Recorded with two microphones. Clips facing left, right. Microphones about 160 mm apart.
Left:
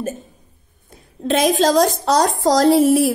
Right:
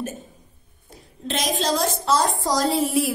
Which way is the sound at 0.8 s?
55° left (ahead or behind).